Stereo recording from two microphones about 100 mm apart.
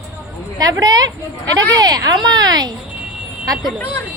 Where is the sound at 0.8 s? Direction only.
40° right (ahead or behind).